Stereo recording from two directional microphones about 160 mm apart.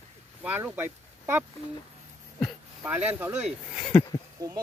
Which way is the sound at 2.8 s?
10° right (ahead or behind).